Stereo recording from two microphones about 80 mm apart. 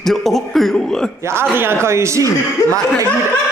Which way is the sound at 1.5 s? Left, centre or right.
Right.